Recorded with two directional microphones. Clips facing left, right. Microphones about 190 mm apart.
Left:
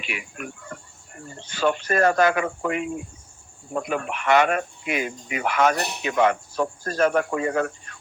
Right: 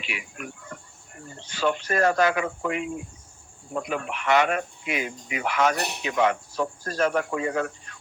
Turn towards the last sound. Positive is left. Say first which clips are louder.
# left 3 dB
turn(degrees=50)  # may be behind; listen again after turning